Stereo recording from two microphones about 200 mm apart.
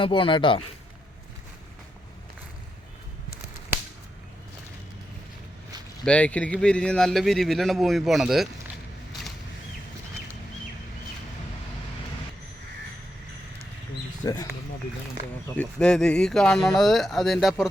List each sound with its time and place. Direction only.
0.0 s speech: 25° left (ahead or behind)
6.1 s speech: 5° left (ahead or behind)
14.2 s speech: 15° left (ahead or behind)
15.5 s speech: 5° left (ahead or behind)